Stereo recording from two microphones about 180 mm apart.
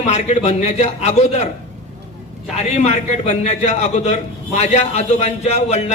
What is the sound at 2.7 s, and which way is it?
A man's voice, 40° left (ahead or behind).